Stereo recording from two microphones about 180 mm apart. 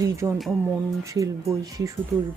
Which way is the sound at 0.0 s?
15° right (ahead or behind).